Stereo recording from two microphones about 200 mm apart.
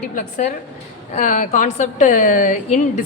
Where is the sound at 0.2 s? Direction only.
40° left (ahead or behind).